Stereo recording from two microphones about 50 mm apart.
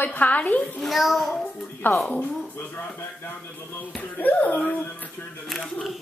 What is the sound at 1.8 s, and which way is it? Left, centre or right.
Speech, left.